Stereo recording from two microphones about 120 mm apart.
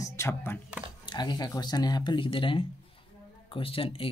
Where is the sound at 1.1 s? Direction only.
35° left (ahead or behind).